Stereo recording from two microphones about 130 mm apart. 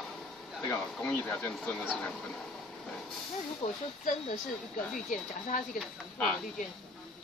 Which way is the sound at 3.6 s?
50° left (ahead or behind).